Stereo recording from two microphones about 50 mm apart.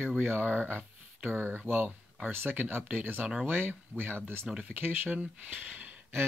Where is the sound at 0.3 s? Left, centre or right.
Right.